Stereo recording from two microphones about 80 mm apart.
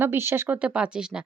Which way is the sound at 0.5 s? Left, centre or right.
Centre.